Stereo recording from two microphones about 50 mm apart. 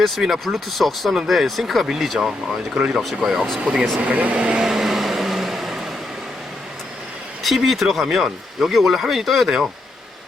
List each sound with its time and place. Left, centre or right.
0.0 s speech: centre; by 4.6 s right
4.6 s vehicle: centre
7.4 s speech: centre